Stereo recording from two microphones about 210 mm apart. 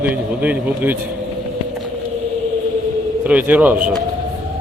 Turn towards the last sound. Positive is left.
turn(degrees=-5)  # may be behind; listen again after turning